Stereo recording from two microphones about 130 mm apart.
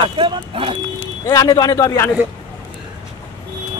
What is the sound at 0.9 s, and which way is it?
Speech, 25° left (ahead or behind).